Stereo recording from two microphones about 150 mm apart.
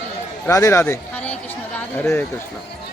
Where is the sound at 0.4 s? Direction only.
20° left (ahead or behind).